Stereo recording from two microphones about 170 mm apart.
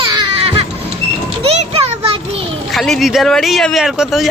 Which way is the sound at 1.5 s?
35° right (ahead or behind).